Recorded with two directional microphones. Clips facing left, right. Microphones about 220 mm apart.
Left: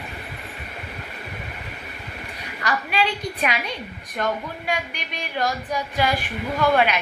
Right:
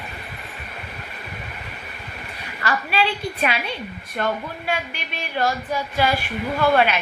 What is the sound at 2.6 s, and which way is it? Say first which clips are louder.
A woman's voice: right 1 dB; 15° left (ahead or behind).